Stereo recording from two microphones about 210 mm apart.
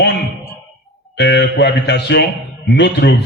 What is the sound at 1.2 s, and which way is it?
A man's voice, 55° left (ahead or behind).